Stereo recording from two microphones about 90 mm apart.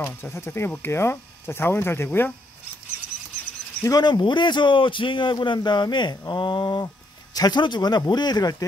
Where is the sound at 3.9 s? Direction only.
45° left (ahead or behind).